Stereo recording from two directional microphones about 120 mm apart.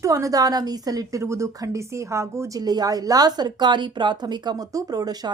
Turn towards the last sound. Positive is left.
turn(degrees=-35)  # may be behind; listen again after turning